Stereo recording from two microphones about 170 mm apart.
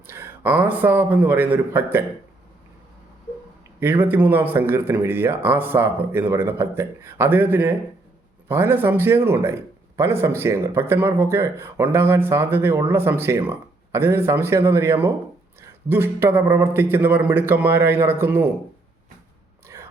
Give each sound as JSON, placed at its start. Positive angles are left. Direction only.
{"t": 0.1, "sound": "a man's voice", "side_deg": -15}
{"t": 3.8, "sound": "a man's voice", "side_deg": -10}
{"t": 19.6, "sound": "a sound", "side_deg": -15}